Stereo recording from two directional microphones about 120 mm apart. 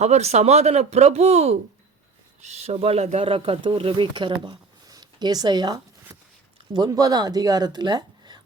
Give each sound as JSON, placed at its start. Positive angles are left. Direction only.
{"t": 0.0, "sound": "speech", "side_deg": -65}
{"t": 3.2, "sound": "speech", "side_deg": -50}
{"t": 6.1, "sound": "a sound", "side_deg": -30}
{"t": 6.7, "sound": "speech", "side_deg": -35}